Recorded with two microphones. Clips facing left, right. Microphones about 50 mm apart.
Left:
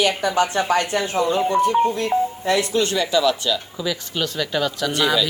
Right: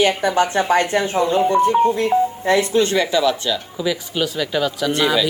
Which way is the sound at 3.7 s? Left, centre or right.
Centre.